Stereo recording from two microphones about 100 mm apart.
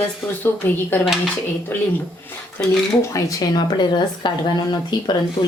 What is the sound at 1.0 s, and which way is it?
Speech, 5° right (ahead or behind).